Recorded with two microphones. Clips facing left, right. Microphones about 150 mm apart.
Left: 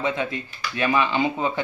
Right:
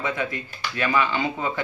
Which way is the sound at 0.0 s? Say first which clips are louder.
Left 2 dB; 20° left (ahead or behind).